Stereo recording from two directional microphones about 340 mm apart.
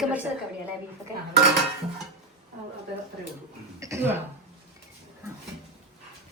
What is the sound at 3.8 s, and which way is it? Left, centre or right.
Speech, centre.